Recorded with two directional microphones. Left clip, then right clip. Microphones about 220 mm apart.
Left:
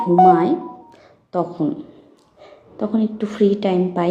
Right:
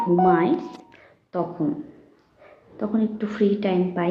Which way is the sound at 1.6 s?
25° left (ahead or behind).